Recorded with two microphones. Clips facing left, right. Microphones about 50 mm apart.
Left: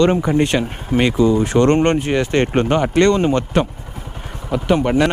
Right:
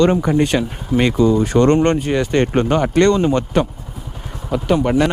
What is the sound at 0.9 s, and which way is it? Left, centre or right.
Speech, centre.